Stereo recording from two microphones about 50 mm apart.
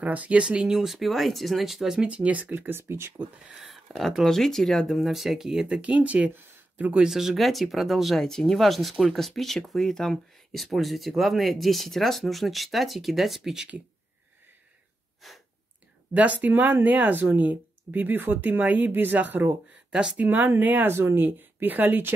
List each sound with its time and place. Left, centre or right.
0.0 s speech: right
0.4 s speech: centre
2.0 s speech: right
2.5 s speech: right
3.2 s speech: right
4.2 s speech: centre
5.8 s speech: right
6.3 s a sound: right
7.0 s speech: centre
15.2 s speech: centre
16.1 s speech: right
20.9 s speech: right